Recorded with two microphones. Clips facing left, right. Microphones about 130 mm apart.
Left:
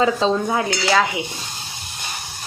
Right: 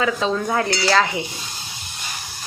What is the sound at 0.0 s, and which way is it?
Speech, 25° left (ahead or behind).